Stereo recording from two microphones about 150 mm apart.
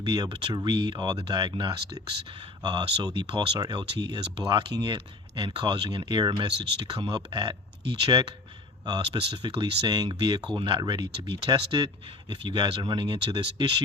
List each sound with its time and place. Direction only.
0.0 s speech: 30° right (ahead or behind)